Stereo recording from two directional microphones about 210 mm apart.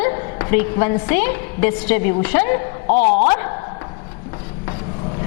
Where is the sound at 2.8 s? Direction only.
40° left (ahead or behind).